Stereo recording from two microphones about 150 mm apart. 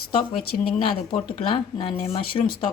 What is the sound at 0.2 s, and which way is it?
Speech, 35° left (ahead or behind).